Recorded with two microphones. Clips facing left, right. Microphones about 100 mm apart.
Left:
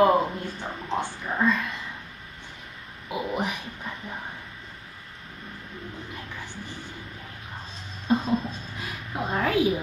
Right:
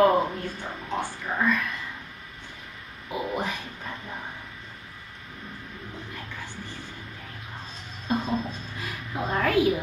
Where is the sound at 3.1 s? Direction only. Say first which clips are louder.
Left 1 dB; 15° left (ahead or behind).